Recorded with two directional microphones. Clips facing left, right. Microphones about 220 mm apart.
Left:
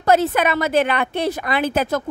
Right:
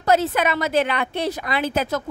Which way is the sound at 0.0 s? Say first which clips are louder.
Left 2 dB; 55° left (ahead or behind).